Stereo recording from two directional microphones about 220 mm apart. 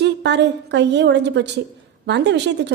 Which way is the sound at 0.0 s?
50° right (ahead or behind).